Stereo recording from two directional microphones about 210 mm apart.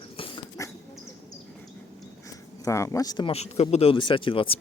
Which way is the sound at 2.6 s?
15° left (ahead or behind).